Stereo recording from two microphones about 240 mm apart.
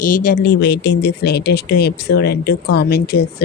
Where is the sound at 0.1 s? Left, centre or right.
Left.